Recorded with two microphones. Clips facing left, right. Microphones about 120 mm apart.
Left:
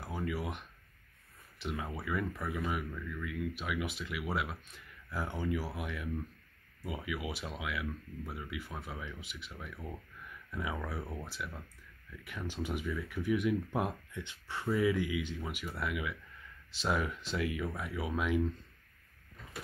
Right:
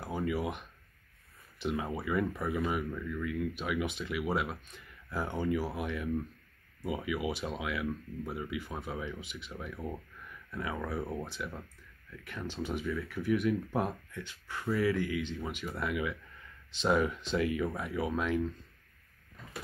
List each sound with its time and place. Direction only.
0.0 s speech: centre (ahead or behind)
11.0 s speech: 15° right (ahead or behind)
11.2 s speech: 5° left (ahead or behind)